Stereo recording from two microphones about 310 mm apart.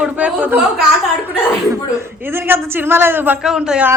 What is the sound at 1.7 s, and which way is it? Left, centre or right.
A man's voice, centre.